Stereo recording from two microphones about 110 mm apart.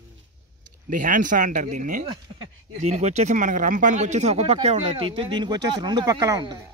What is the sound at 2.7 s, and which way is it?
Speech, 90° right.